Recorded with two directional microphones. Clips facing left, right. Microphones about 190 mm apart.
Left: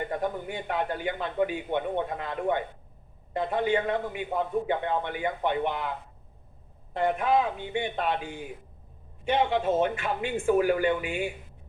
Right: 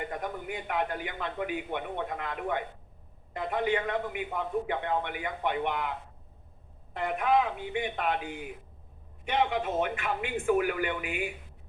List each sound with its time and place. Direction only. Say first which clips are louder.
0.1 s a man's voice: left 5 dB; 25° left (ahead or behind)
6.9 s a man's voice: left 2 dB; 30° left (ahead or behind)